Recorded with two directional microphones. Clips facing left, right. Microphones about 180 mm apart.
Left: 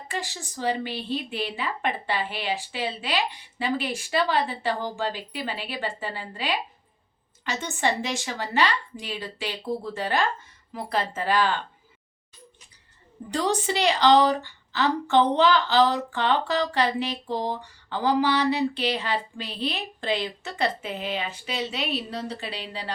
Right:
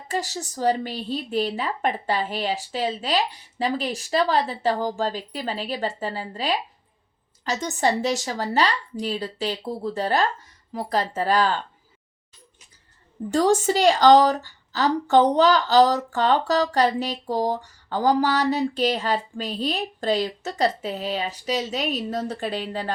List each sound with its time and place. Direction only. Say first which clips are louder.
0.1 s a woman's voice: right 6 dB; 40° right (ahead or behind)
13.3 s a woman's voice: right 6 dB; 45° right (ahead or behind)